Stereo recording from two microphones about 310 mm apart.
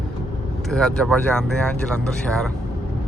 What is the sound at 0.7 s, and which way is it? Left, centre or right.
Speech, centre.